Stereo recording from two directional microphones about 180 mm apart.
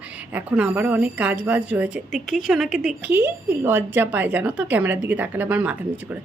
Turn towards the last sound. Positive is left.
turn(degrees=-10)  # may be behind; listen again after turning